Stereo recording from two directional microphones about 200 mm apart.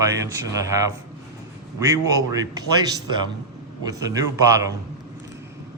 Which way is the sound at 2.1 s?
20° right (ahead or behind).